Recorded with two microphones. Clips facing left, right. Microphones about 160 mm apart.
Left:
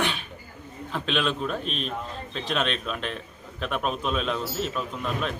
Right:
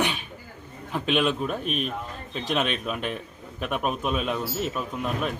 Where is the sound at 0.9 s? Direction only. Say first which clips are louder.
Right 3 dB; 10° right (ahead or behind).